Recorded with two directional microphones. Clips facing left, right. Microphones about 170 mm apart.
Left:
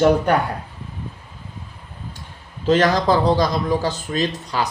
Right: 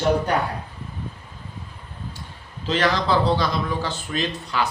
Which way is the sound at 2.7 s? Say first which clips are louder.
Left 5 dB; 45° left (ahead or behind).